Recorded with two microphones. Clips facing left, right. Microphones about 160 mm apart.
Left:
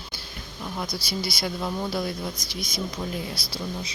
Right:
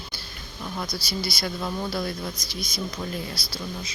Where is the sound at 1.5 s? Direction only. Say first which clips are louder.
Left 1 dB; 5° left (ahead or behind).